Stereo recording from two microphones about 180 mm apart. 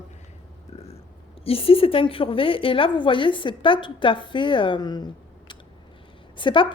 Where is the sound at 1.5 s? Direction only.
30° left (ahead or behind).